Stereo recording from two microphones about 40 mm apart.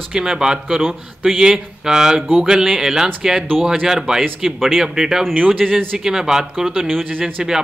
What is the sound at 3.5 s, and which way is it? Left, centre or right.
Speech, centre.